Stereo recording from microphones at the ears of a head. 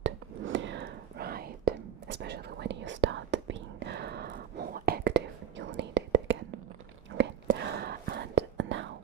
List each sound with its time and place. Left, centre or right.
0.0 s whispering: right